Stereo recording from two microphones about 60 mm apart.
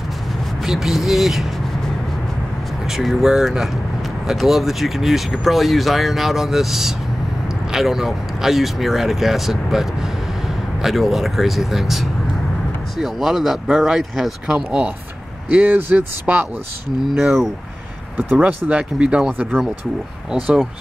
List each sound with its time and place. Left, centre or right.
0.7 s speech: centre
3.0 s speech: centre
15.5 s speech: right
17.1 s speech: centre
18.4 s speech: right